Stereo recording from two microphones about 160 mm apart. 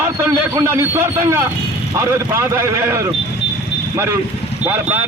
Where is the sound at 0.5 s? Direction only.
15° right (ahead or behind).